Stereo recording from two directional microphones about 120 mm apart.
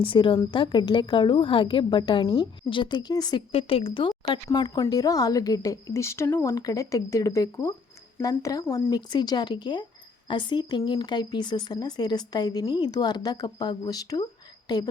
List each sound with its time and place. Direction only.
0.0 s a woman's voice: 45° left (ahead or behind)
3.5 s a woman's voice: 50° left (ahead or behind)
4.1 s a woman's voice: 35° left (ahead or behind)
8.9 s speech: 40° left (ahead or behind)